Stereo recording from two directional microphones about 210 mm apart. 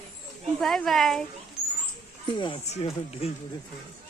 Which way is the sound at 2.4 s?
30° left (ahead or behind).